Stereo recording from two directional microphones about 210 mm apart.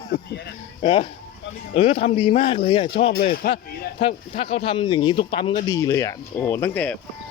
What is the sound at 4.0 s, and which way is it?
Speech, 25° left (ahead or behind).